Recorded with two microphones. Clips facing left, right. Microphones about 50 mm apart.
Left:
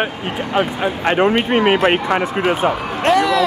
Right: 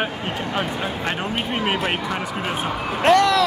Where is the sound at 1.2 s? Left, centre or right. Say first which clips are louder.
Left 10 dB; left.